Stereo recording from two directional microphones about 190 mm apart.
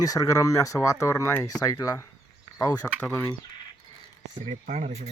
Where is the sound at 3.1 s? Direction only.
10° left (ahead or behind).